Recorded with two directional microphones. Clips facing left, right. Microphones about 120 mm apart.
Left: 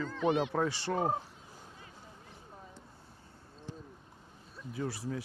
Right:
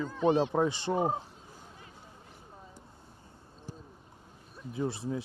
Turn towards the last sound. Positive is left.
turn(degrees=-25)  # may be behind; listen again after turning